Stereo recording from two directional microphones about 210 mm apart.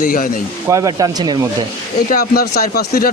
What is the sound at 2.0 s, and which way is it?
Speech, 45° left (ahead or behind).